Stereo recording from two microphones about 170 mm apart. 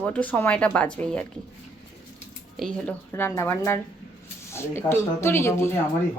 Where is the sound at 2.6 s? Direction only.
5° left (ahead or behind).